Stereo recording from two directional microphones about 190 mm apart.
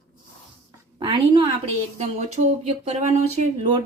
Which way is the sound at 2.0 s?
35° right (ahead or behind).